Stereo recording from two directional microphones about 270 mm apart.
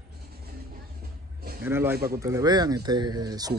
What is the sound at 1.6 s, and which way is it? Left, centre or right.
Speech, centre.